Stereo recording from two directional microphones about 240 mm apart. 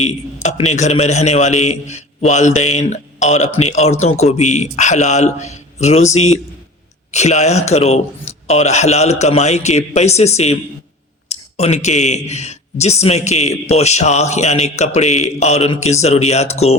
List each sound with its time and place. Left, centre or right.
0.4 s speech: left